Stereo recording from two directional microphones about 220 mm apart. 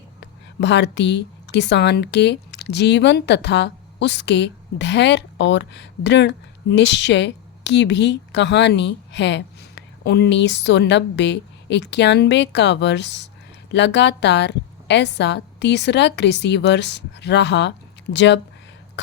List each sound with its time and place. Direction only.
0.6 s speech: 50° left (ahead or behind)